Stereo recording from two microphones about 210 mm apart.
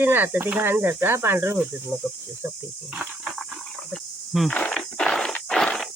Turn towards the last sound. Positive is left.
turn(degrees=0)  # may be behind; listen again after turning